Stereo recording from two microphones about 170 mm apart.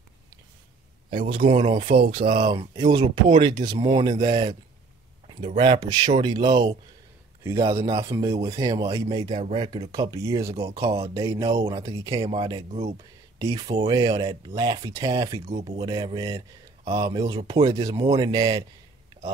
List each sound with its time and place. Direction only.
1.3 s speech: 35° right (ahead or behind)
5.8 s speech: 25° right (ahead or behind)
9.3 s speech: 35° right (ahead or behind)
9.9 s speech: 20° right (ahead or behind)
12.2 s speech: 30° right (ahead or behind)